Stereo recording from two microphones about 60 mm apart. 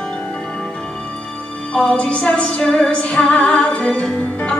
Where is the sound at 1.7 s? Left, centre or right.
Centre.